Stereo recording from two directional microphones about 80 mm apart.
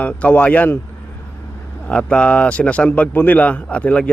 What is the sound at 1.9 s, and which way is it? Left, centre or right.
A man's voice, centre.